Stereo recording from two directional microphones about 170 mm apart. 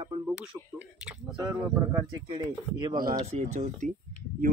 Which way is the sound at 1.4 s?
15° right (ahead or behind).